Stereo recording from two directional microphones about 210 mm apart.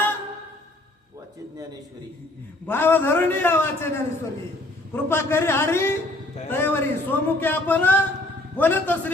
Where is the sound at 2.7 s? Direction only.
10° left (ahead or behind).